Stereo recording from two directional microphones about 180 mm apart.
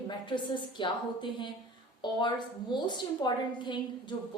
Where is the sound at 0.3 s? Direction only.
25° left (ahead or behind).